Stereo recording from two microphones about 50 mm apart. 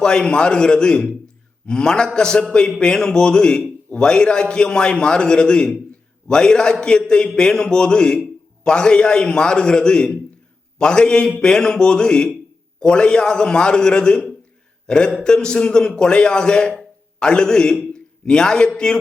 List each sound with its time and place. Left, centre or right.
0.0 s a man's voice: centre